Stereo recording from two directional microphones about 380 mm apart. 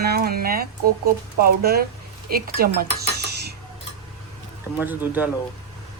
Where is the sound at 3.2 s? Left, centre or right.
Right.